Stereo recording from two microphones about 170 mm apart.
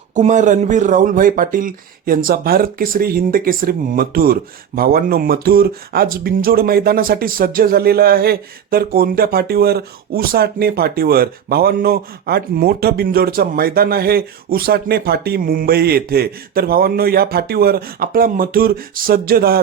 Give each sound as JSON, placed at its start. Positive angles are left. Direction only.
{"t": 0.1, "sound": "speech", "side_deg": -45}